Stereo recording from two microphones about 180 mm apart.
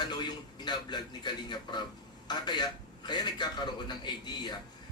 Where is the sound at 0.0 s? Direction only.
25° left (ahead or behind).